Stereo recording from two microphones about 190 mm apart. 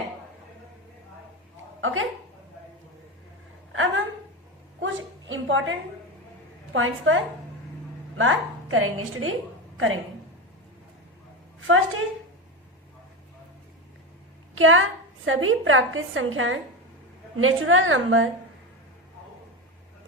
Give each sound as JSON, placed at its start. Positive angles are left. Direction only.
{"t": 1.8, "sound": "speech", "side_deg": -90}
{"t": 3.7, "sound": "a sound", "side_deg": -90}
{"t": 6.7, "sound": "a woman's voice", "side_deg": -90}
{"t": 8.2, "sound": "a woman's voice", "side_deg": -90}
{"t": 14.5, "sound": "a woman's voice", "side_deg": -90}